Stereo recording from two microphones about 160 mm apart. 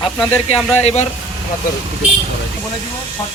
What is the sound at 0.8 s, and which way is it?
Speech, 40° left (ahead or behind).